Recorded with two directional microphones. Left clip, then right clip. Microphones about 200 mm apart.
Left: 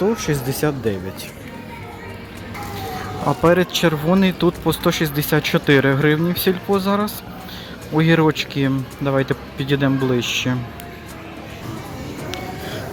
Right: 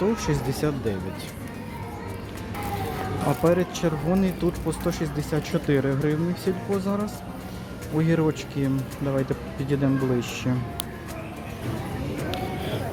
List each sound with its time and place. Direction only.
0.0 s speech: 15° left (ahead or behind)
3.2 s speech: 15° left (ahead or behind)
12.3 s music: centre (ahead or behind)